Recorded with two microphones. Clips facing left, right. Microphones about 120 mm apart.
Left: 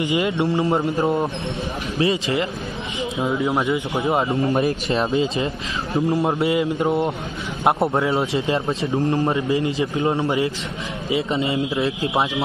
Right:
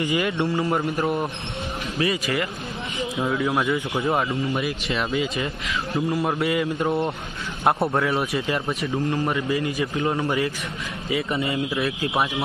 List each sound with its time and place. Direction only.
0.0 s a man's voice: 25° left (ahead or behind)